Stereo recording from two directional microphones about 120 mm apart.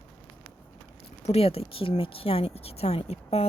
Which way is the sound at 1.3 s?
55° left (ahead or behind).